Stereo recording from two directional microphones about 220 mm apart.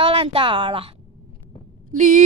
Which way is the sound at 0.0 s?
25° right (ahead or behind).